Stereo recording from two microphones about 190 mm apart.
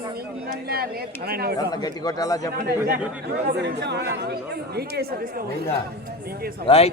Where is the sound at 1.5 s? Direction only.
20° left (ahead or behind).